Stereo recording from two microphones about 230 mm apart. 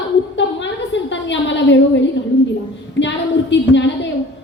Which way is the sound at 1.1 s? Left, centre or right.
Left.